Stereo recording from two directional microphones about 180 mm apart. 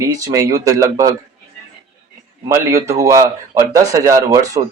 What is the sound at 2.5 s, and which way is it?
A man's voice, 15° right (ahead or behind).